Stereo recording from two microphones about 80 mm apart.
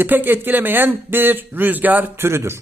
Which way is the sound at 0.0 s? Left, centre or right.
Right.